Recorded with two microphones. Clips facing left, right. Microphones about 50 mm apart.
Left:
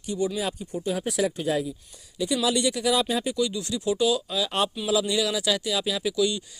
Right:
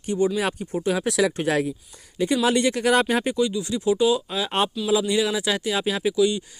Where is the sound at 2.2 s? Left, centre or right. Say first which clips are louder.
Right 4 dB; right.